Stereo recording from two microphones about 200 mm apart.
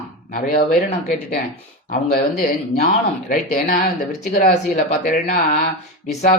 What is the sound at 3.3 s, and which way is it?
Speech, 40° left (ahead or behind).